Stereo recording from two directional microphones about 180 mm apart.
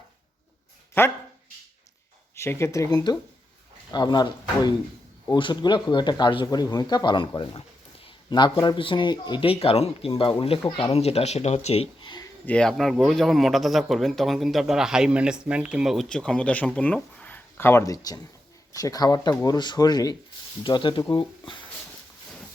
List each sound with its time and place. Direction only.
1.0 s speech: 15° left (ahead or behind)
2.3 s a man's voice: 15° left (ahead or behind)
12.5 s a man's voice: 5° left (ahead or behind); by 21.6 s 25° left (ahead or behind)